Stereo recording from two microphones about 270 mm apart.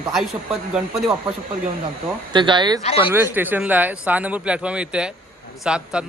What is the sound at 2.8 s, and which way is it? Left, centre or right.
Speech, left.